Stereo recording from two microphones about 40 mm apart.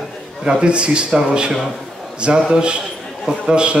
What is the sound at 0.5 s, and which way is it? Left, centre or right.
A man's voice, right.